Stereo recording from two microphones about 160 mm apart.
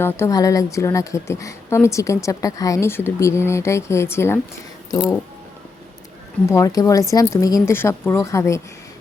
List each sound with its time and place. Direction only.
0.0 s a woman's voice: 20° left (ahead or behind)
6.5 s a woman's voice: 20° left (ahead or behind)